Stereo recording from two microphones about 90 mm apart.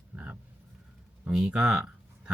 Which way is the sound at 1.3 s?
10° right (ahead or behind).